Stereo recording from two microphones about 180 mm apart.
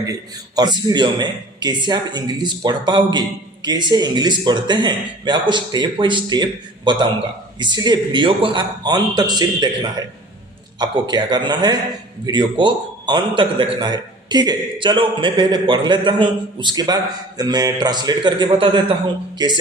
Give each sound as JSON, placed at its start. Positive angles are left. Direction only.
{"t": 0.0, "sound": "a man's voice", "side_deg": -20}
{"t": 10.8, "sound": "a man's voice", "side_deg": -25}